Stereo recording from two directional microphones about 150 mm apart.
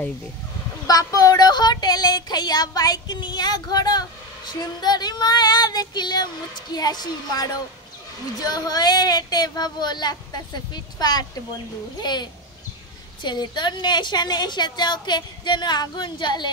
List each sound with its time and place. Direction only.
0.8 s a woman's voice: 25° left (ahead or behind)